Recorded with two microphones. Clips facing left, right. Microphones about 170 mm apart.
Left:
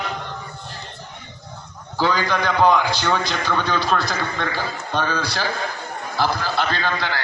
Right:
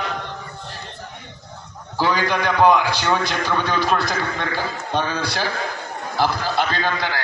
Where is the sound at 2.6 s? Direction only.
15° right (ahead or behind).